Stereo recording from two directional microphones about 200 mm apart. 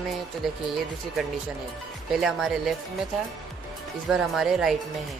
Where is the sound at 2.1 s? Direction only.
Centre (ahead or behind).